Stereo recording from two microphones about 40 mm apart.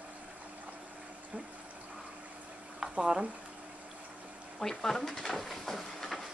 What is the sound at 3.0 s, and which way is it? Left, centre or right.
Speech, right.